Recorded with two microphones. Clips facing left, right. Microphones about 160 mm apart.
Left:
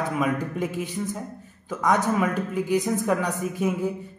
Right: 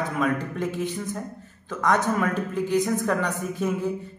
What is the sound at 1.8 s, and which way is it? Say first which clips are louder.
Speech: left 1 dB; 10° left (ahead or behind).